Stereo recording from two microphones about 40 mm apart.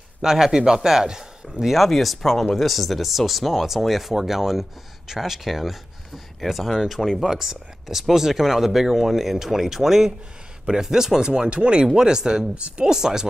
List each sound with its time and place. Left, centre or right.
0.2 s speech: centre
12.5 s speech: right
12.8 s speech: centre